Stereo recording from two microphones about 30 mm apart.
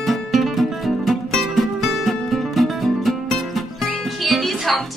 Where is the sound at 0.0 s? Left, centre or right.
Centre.